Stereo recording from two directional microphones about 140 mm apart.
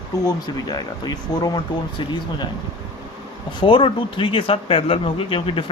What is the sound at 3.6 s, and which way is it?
Speech, 40° left (ahead or behind).